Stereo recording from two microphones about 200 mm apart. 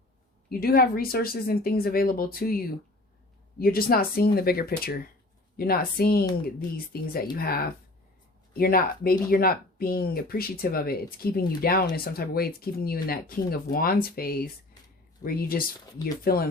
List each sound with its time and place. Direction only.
0.6 s speech: 50° left (ahead or behind)
16.0 s speech: 20° left (ahead or behind)